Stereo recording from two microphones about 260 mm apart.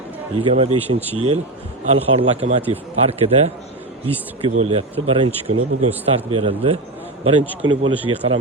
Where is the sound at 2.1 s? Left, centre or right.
Right.